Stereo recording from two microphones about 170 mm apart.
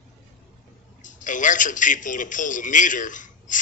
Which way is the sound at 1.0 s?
50° left (ahead or behind).